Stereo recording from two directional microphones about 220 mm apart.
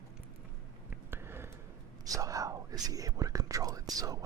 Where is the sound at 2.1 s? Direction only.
15° right (ahead or behind).